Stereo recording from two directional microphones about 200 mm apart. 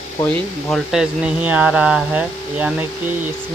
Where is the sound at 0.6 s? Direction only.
Centre (ahead or behind).